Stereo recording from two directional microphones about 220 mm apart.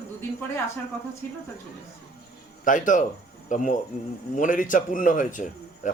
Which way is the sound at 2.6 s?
35° left (ahead or behind).